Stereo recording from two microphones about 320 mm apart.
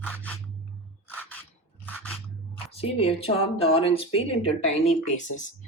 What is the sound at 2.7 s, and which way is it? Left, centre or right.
Speech, centre.